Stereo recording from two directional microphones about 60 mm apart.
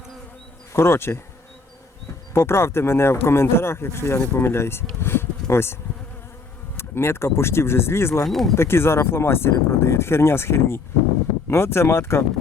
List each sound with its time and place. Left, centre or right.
0.7 s speech: left
2.3 s speech: left
6.7 s speech: left
8.2 s speech: centre
8.5 s speech: left